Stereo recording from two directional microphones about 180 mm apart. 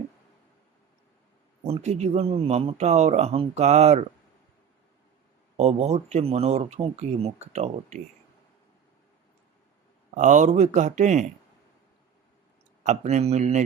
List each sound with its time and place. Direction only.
1.6 s speech: 35° right (ahead or behind)
5.5 s speech: 35° right (ahead or behind)
10.2 s speech: 45° right (ahead or behind)
12.8 s speech: 40° right (ahead or behind)